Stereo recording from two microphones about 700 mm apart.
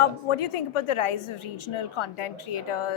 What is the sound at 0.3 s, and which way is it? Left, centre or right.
A woman's voice, left.